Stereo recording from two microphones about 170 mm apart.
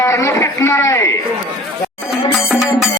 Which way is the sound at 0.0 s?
15° left (ahead or behind).